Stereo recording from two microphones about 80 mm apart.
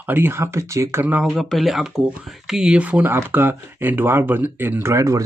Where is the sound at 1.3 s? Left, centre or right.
Centre.